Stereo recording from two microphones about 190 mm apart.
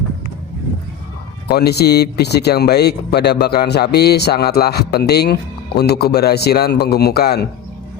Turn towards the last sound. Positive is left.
turn(degrees=55)  # may be behind; listen again after turning